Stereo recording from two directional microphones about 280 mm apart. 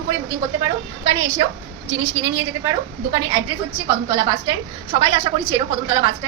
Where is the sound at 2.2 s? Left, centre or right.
Right.